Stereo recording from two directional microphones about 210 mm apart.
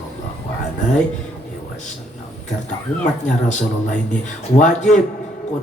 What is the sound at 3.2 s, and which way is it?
A man's voice, 35° left (ahead or behind).